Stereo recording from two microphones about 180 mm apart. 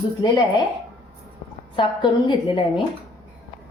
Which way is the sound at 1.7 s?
25° left (ahead or behind).